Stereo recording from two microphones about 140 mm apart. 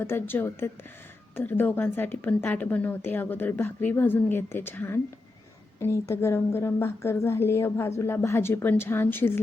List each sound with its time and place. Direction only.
0.0 s a woman's voice: 15° left (ahead or behind)